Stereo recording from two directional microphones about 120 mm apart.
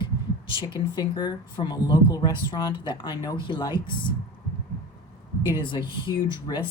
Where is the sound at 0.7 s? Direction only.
35° left (ahead or behind).